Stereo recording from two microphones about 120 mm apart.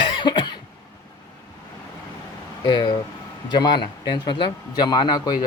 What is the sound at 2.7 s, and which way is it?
Speech, 35° left (ahead or behind).